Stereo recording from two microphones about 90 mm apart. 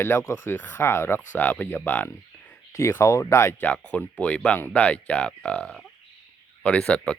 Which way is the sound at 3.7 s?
15° left (ahead or behind).